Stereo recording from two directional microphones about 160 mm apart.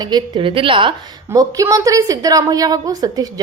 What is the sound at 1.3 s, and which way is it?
A woman's voice, 20° right (ahead or behind).